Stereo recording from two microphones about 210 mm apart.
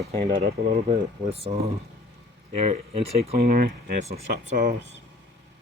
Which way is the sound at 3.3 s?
45° right (ahead or behind).